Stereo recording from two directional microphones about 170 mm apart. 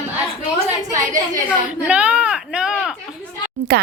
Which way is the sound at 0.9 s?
50° right (ahead or behind).